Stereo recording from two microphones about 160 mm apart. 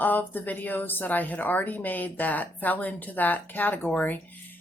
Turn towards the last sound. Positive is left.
turn(degrees=10)  # may be behind; listen again after turning